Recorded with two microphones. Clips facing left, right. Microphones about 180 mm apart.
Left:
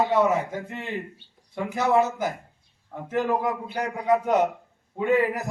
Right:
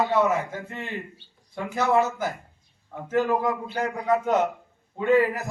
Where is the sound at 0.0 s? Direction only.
15° left (ahead or behind).